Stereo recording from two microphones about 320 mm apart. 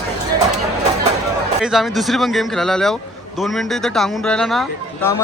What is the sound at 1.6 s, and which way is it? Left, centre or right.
Speech, centre.